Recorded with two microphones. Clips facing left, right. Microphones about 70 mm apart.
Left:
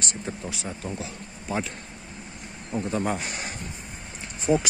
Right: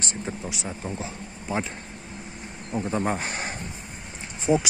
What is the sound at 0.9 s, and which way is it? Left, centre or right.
Speech, right.